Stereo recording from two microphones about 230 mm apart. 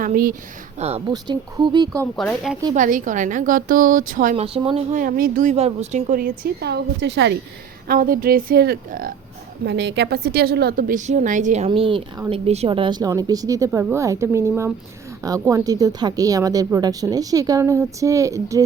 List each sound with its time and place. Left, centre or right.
0.0 s a woman's voice: right
0.8 s speech: right
2.1 s speech: centre
2.7 s a woman's voice: right
7.9 s a woman's voice: right; by 18.6 s centre